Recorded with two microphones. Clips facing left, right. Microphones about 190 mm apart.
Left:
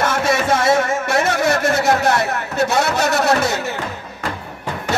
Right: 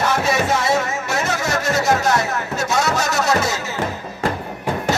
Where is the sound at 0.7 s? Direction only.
55° left (ahead or behind).